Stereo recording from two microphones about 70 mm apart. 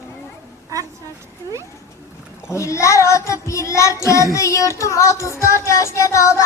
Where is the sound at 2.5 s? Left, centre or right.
Left.